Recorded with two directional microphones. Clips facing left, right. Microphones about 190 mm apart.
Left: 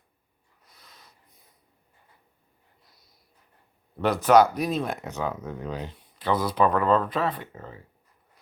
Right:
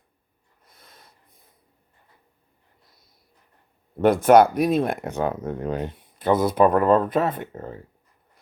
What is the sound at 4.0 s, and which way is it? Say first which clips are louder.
Speech: right 4 dB; 50° right (ahead or behind).